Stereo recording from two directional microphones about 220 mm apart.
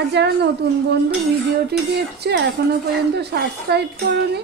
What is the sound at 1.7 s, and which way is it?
Speech, 45° right (ahead or behind).